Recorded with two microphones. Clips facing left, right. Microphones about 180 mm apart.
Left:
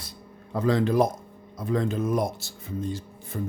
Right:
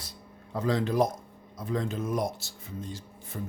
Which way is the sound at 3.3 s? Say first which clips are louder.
Left 6 dB; 70° left (ahead or behind).